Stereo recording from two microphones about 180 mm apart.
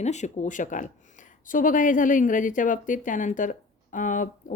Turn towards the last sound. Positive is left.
turn(degrees=45)  # may be behind; listen again after turning